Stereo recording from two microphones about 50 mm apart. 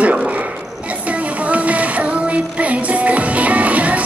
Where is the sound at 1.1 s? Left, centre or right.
Right.